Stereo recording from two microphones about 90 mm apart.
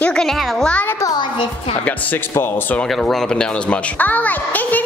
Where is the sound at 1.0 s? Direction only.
55° left (ahead or behind).